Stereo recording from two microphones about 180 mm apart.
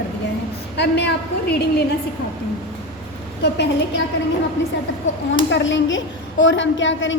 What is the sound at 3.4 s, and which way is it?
Speech, 70° left (ahead or behind).